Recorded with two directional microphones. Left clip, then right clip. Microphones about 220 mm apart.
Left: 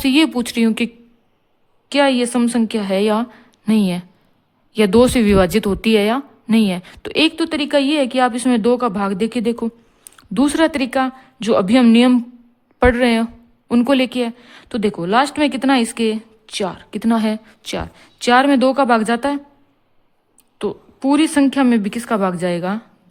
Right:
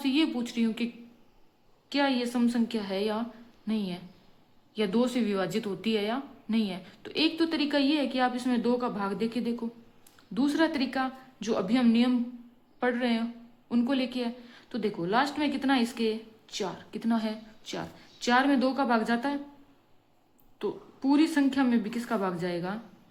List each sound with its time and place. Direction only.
0.0 s a woman's voice: 50° left (ahead or behind)
1.9 s a woman's voice: 50° left (ahead or behind)
20.6 s a woman's voice: 45° left (ahead or behind)